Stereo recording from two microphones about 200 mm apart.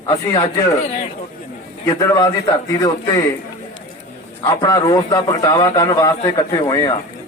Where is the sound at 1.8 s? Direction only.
15° left (ahead or behind).